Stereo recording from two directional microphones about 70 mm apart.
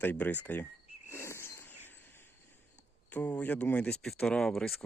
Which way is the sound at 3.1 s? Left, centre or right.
Left.